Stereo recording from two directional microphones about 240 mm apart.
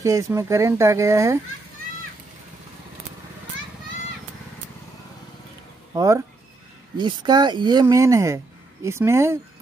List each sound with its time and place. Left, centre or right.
0.0 s speech: centre
5.9 s speech: centre